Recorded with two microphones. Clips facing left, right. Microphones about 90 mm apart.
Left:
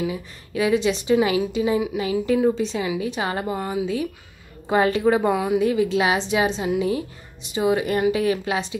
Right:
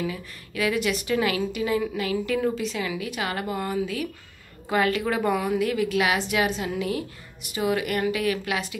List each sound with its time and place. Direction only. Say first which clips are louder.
0.0 s a woman's voice: left 4 dB; 25° left (ahead or behind)